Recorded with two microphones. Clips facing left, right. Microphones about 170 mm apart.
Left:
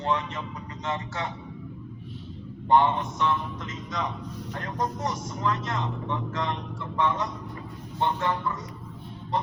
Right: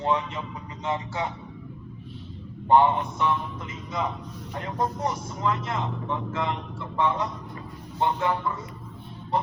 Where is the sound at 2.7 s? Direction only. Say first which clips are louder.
Right 2 dB; 15° right (ahead or behind).